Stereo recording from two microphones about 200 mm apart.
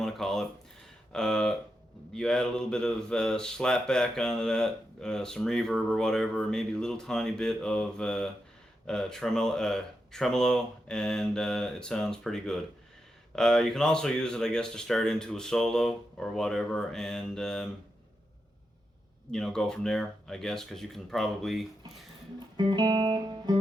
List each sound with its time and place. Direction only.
0.0 s speech: centre (ahead or behind)
19.3 s speech: 5° left (ahead or behind)
22.5 s music: 20° right (ahead or behind)